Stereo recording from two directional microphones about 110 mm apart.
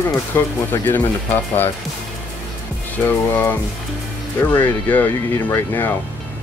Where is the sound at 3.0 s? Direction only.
20° left (ahead or behind).